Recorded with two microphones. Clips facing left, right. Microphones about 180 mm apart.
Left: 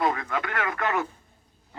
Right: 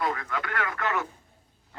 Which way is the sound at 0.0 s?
20° left (ahead or behind).